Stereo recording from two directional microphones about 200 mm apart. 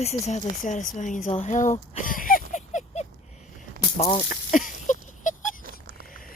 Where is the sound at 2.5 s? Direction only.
40° left (ahead or behind).